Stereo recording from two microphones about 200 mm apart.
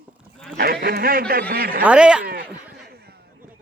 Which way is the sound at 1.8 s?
5° right (ahead or behind).